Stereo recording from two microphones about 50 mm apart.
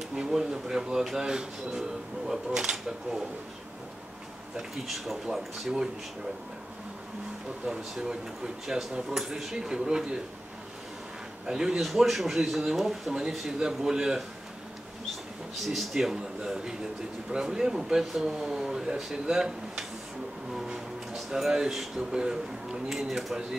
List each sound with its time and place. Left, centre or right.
0.3 s speech: centre
4.6 s speech: centre
7.6 s speech: centre
9.1 s speech: centre
11.4 s speech: centre
11.8 s speech: centre
15.6 s speech: centre
20.5 s vehicle: centre
22.1 s speech: centre
22.8 s speech: centre